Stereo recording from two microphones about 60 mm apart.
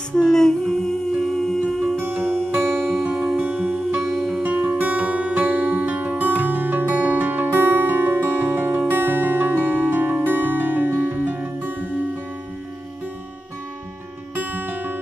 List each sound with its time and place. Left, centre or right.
0.1 s humming: centre
2.0 s music: right
3.1 s music: centre
3.3 s music: right
4.0 s music: centre
4.4 s music: right
14.3 s music: right